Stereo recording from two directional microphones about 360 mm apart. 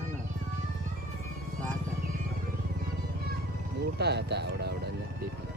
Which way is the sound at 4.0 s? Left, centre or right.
Right.